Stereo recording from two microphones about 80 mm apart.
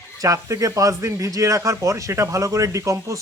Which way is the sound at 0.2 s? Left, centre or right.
Right.